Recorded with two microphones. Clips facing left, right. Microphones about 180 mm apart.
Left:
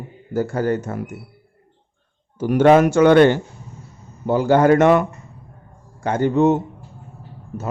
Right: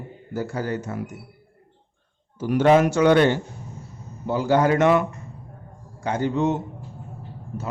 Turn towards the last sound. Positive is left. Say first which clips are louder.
# left 6 dB
turn(degrees=50)  # may be behind; listen again after turning